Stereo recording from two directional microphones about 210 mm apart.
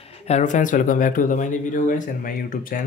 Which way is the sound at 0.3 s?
35° left (ahead or behind).